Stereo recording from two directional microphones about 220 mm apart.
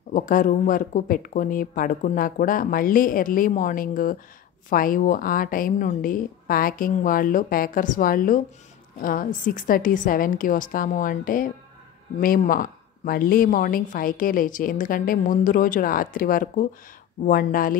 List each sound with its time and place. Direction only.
0.1 s a woman's voice: 35° left (ahead or behind)